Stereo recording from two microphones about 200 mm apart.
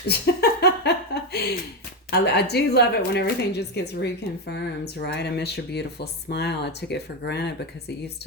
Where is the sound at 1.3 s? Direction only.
55° left (ahead or behind).